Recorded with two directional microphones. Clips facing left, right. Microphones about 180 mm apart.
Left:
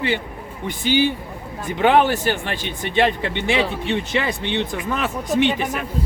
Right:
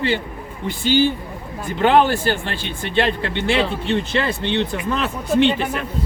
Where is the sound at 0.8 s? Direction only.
15° left (ahead or behind).